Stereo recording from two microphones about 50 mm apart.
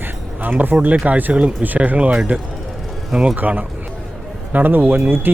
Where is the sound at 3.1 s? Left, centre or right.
Centre.